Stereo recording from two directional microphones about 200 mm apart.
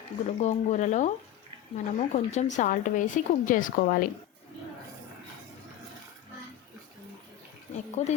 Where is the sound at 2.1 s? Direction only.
35° left (ahead or behind).